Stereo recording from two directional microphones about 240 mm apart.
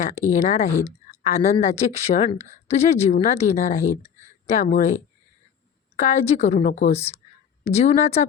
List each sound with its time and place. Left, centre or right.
0.0 s a woman's voice: left
0.7 s speech: centre
1.0 s a woman's voice: left
6.0 s a woman's voice: left